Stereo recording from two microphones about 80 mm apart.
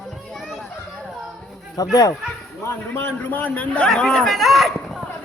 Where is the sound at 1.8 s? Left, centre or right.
Left.